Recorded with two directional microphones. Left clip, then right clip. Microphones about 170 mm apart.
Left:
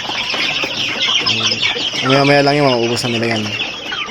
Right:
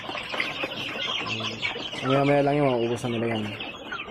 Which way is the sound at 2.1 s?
15° left (ahead or behind).